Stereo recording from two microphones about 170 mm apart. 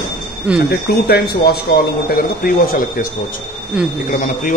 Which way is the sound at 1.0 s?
70° left (ahead or behind).